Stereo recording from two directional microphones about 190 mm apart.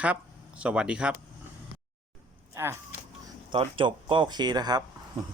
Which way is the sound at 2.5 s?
15° right (ahead or behind).